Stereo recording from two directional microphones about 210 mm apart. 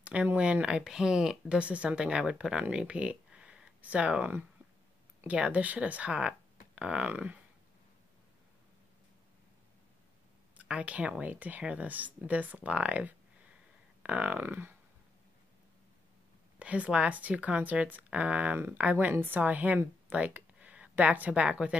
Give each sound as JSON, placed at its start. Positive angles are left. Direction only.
{"t": 0.0, "sound": "speech", "side_deg": -5}
{"t": 10.6, "sound": "speech", "side_deg": -5}
{"t": 16.5, "sound": "speech", "side_deg": -5}